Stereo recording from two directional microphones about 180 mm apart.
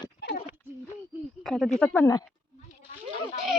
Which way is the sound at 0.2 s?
65° left (ahead or behind).